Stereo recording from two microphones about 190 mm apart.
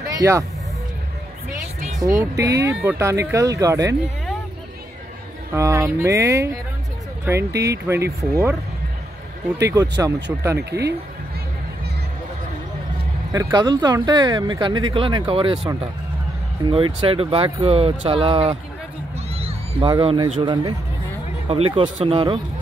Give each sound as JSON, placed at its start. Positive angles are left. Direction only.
{"t": 0.1, "sound": "speech", "side_deg": -15}
{"t": 2.0, "sound": "speech", "side_deg": -15}
{"t": 5.5, "sound": "speech", "side_deg": -15}
{"t": 9.7, "sound": "speech", "side_deg": -15}
{"t": 13.3, "sound": "speech", "side_deg": -20}
{"t": 16.7, "sound": "speech", "side_deg": -25}
{"t": 19.1, "sound": "music", "side_deg": -30}
{"t": 19.9, "sound": "speech", "side_deg": -25}